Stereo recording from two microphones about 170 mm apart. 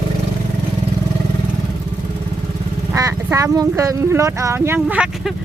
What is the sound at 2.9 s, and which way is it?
Speech, 20° right (ahead or behind).